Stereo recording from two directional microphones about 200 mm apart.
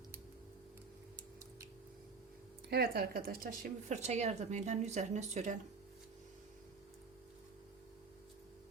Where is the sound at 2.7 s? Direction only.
50° right (ahead or behind).